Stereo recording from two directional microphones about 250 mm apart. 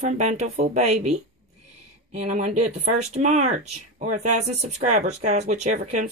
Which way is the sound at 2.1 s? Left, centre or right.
Right.